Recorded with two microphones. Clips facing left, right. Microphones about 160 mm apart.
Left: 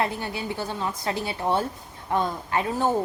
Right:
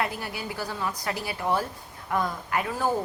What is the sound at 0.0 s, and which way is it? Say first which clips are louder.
A woman's voice: left 3 dB; 25° left (ahead or behind).